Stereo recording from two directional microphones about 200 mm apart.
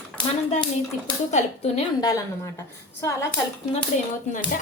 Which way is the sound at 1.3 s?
35° left (ahead or behind).